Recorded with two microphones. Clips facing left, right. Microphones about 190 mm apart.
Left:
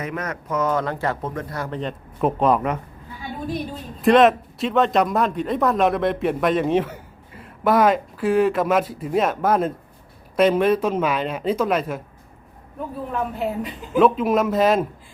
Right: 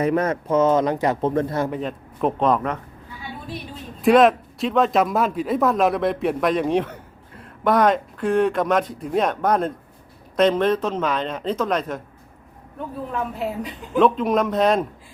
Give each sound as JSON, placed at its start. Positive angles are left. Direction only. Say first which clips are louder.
{"t": 0.0, "sound": "speech", "louder": "right 8 dB", "side_deg": -30}
{"t": 1.2, "sound": "speech", "louder": "right 7 dB", "side_deg": -30}
{"t": 1.7, "sound": "a man's voice", "louder": "right 1 dB", "side_deg": -5}
{"t": 2.4, "sound": "speech", "louder": "left 1 dB", "side_deg": 10}
{"t": 4.0, "sound": "a man's voice", "louder": "even", "side_deg": 0}
{"t": 13.1, "sound": "a man's voice", "louder": "left 2 dB", "side_deg": 0}